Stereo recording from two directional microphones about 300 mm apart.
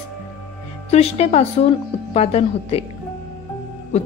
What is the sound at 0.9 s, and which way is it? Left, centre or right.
Speech, left.